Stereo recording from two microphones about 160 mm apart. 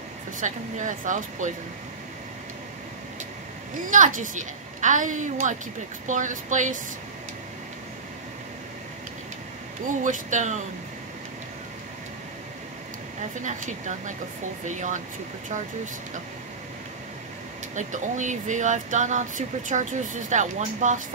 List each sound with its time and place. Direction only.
0.4 s speech: 55° right (ahead or behind)
3.8 s speech: 55° right (ahead or behind)
10.0 s speech: 50° right (ahead or behind)
13.4 s speech: 50° right (ahead or behind)
17.7 s speech: 50° right (ahead or behind)